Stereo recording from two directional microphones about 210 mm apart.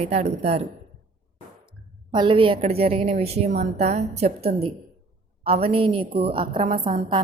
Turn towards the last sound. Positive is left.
turn(degrees=-25)  # may be behind; listen again after turning